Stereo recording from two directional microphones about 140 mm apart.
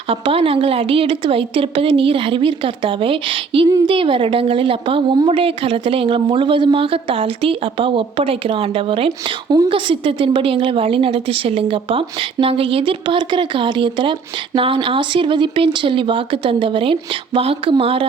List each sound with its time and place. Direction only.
0.1 s a woman's voice: 40° right (ahead or behind)